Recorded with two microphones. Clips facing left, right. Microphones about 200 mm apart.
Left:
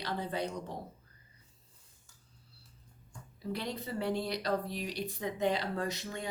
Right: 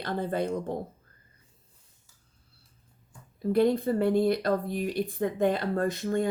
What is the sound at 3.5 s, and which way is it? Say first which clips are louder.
Speech: right 14 dB; 50° right (ahead or behind).